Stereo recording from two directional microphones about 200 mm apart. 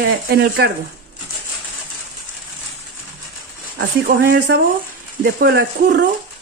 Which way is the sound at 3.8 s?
50° right (ahead or behind).